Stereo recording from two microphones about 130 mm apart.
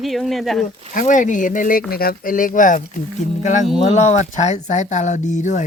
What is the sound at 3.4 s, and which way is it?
Speech, 70° left (ahead or behind).